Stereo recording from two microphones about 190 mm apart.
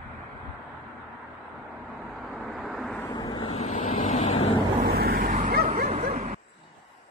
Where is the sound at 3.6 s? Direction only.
35° left (ahead or behind).